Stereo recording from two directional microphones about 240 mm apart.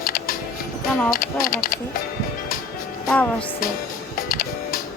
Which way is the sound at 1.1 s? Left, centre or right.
Left.